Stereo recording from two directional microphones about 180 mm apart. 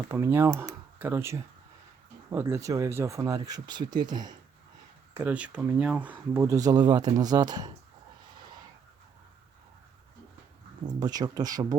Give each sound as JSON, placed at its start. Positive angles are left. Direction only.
{"t": 0.1, "sound": "speech", "side_deg": -15}
{"t": 5.1, "sound": "speech", "side_deg": -10}
{"t": 10.8, "sound": "speech", "side_deg": -20}